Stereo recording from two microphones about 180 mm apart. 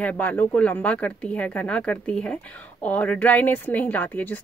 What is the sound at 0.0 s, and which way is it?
A woman's voice, 10° left (ahead or behind).